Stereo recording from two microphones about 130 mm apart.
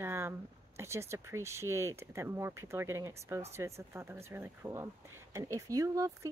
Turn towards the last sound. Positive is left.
turn(degrees=-25)  # may be behind; listen again after turning